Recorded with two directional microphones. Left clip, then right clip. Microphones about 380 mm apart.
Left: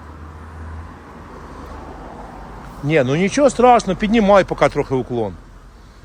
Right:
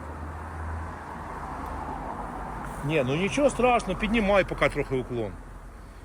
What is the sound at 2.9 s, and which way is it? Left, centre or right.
Speech, left.